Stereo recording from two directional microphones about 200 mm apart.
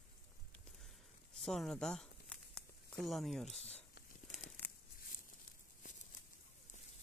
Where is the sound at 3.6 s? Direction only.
30° left (ahead or behind).